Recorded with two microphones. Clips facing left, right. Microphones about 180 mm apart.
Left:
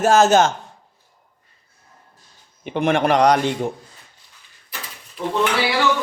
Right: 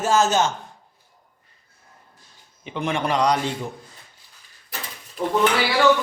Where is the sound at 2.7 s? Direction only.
60° left (ahead or behind).